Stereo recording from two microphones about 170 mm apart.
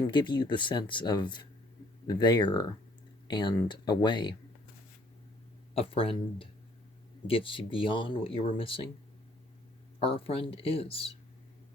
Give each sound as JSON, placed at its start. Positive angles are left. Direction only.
{"t": 0.1, "sound": "speech", "side_deg": 25}
{"t": 5.7, "sound": "speech", "side_deg": 35}
{"t": 10.0, "sound": "speech", "side_deg": 35}